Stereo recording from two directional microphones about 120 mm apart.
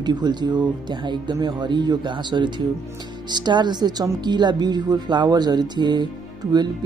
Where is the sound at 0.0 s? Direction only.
35° right (ahead or behind).